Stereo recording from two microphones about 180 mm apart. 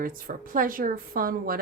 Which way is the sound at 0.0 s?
50° right (ahead or behind).